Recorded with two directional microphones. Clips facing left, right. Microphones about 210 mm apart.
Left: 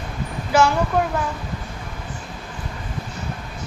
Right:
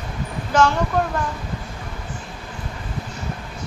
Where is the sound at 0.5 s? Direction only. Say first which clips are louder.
Even; 10° left (ahead or behind).